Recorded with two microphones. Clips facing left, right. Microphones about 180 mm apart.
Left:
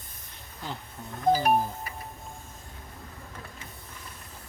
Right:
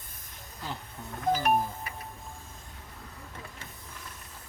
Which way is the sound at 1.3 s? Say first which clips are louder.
Left 3 dB; 30° left (ahead or behind).